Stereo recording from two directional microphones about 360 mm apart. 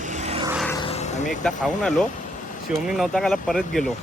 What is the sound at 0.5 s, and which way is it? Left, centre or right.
Vehicle, centre.